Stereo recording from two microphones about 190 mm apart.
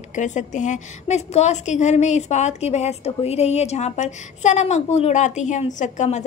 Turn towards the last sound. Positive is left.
turn(degrees=40)  # may be behind; listen again after turning